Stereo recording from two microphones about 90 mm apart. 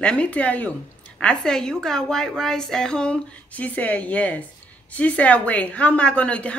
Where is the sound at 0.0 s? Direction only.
15° left (ahead or behind).